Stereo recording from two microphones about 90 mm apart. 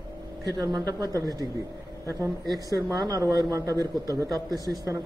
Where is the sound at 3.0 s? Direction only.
45° right (ahead or behind).